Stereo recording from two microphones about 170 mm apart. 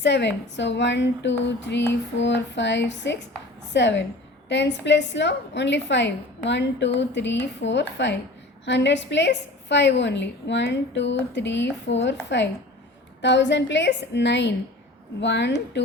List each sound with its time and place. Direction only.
0.0 s a woman's voice: 90° left